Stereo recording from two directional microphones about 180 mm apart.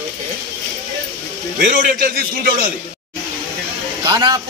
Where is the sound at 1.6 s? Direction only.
50° right (ahead or behind).